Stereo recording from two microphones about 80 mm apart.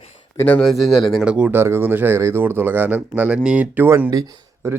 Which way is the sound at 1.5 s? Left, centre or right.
Right.